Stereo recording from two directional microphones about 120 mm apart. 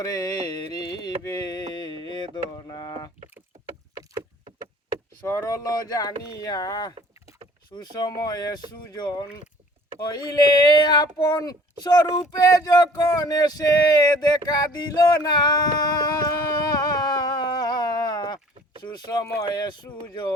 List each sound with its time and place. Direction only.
0.0 s speech: 30° left (ahead or behind)
0.4 s carnatic music: 35° left (ahead or behind)
1.5 s mantra: 35° left (ahead or behind)
5.2 s speech: 25° left (ahead or behind)